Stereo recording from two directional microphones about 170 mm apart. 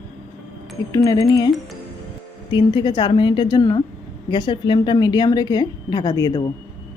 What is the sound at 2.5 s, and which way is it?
A woman's voice, 30° left (ahead or behind).